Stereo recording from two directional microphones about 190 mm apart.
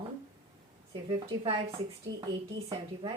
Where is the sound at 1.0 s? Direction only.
25° right (ahead or behind).